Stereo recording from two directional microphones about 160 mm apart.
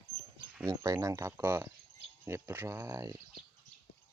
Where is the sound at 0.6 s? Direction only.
20° right (ahead or behind).